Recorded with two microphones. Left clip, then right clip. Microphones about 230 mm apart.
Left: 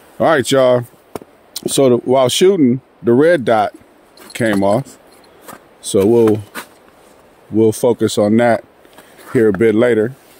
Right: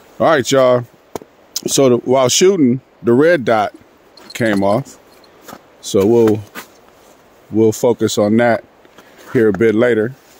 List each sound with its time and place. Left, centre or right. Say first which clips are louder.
0.2 s speech: even; centre
6.3 s a sound: left 1 dB; left
7.5 s speech: even; centre